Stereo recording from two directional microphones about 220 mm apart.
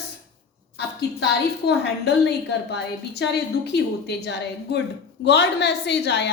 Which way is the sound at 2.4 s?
50° left (ahead or behind).